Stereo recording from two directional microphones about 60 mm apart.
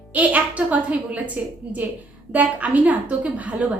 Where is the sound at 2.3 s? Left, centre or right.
Right.